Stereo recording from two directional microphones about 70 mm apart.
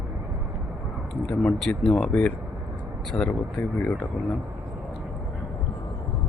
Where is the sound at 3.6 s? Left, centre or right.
Left.